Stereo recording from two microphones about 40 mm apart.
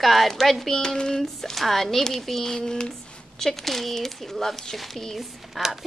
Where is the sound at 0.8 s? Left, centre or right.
Centre.